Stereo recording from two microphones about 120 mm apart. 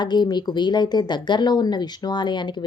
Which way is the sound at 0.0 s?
35° left (ahead or behind).